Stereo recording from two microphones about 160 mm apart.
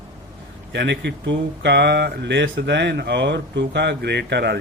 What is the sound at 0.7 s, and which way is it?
Speech, 90° right.